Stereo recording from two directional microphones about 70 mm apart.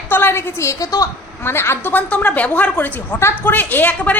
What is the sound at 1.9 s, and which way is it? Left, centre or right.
A woman's voice, left.